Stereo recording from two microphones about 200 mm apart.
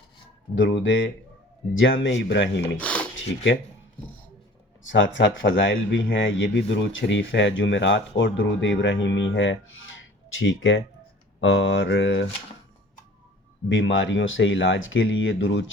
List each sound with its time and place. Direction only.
0.5 s speech: 70° left (ahead or behind)
2.7 s a sound: 5° left (ahead or behind)
3.2 s speech: 65° left (ahead or behind)
4.8 s speech: 70° left (ahead or behind)
11.3 s mantra: 70° left (ahead or behind)
13.7 s speech: 70° left (ahead or behind)